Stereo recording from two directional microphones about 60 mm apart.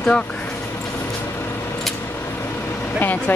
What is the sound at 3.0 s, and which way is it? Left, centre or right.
Speech, left.